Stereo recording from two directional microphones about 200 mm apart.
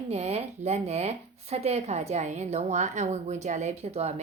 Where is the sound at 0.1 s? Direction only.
30° right (ahead or behind).